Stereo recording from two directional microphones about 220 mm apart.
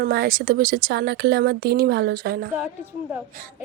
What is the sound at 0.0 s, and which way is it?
A woman's voice, 45° right (ahead or behind).